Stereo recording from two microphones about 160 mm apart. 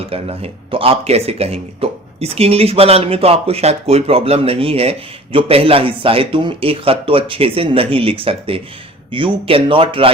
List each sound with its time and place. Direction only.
0.1 s speech: 40° right (ahead or behind)